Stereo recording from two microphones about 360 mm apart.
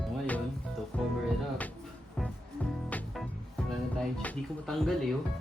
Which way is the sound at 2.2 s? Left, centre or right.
Centre.